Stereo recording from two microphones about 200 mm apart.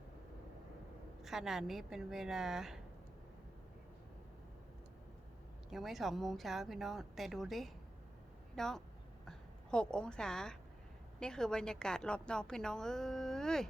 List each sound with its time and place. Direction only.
1.2 s a woman's voice: centre (ahead or behind)
5.7 s a woman's voice: centre (ahead or behind)